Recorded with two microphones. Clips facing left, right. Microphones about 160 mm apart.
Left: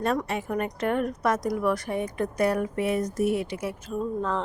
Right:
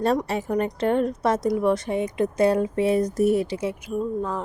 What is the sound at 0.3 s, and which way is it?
A woman's voice, 35° right (ahead or behind).